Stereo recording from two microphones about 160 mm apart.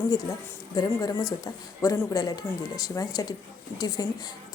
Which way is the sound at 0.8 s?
25° left (ahead or behind).